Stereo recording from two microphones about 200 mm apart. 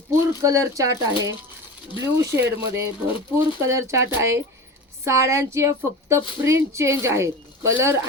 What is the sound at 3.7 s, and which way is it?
Speech, 15° right (ahead or behind).